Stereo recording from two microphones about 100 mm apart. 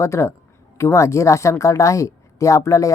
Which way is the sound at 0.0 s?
30° left (ahead or behind).